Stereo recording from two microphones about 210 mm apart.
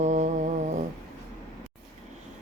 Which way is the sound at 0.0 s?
35° right (ahead or behind).